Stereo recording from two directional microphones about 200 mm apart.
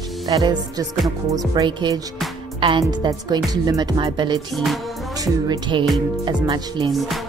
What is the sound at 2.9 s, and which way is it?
Music, 20° right (ahead or behind).